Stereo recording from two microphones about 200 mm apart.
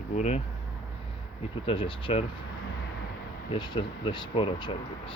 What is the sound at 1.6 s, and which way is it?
Speech, 25° left (ahead or behind).